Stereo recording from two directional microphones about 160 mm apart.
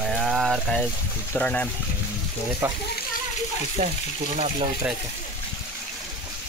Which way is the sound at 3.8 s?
45° right (ahead or behind).